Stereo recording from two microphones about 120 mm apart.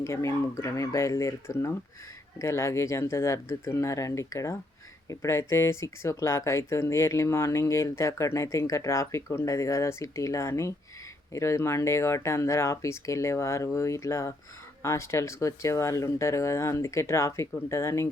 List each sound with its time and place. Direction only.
0.0 s speech: 25° left (ahead or behind)